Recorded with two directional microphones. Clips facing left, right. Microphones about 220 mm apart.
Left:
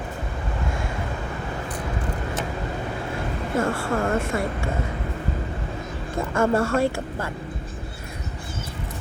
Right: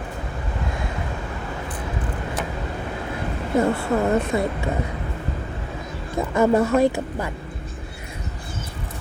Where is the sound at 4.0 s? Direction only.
20° right (ahead or behind).